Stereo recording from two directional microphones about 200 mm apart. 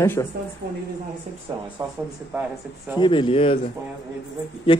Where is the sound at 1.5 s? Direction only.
20° right (ahead or behind).